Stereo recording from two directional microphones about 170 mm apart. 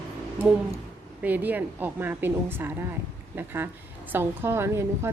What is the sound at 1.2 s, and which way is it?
A woman's voice, 10° right (ahead or behind).